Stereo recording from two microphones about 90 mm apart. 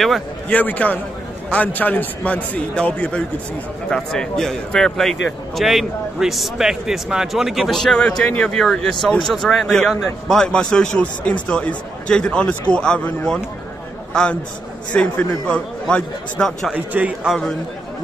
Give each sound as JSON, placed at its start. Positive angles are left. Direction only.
{"t": 0.5, "sound": "a man's voice", "side_deg": 15}
{"t": 16.7, "sound": "a man's voice", "side_deg": -15}